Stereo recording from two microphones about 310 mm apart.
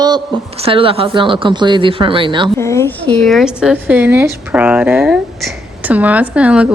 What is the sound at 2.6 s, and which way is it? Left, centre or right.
A woman's voice, centre.